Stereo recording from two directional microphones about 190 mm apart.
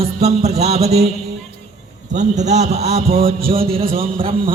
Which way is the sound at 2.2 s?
40° right (ahead or behind).